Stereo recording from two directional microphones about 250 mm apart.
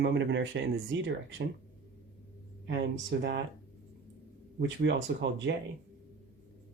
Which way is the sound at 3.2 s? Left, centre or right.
Right.